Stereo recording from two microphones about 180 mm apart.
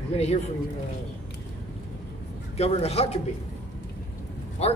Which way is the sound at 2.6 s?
35° left (ahead or behind).